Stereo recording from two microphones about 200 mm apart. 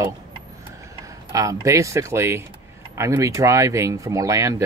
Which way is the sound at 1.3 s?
15° right (ahead or behind).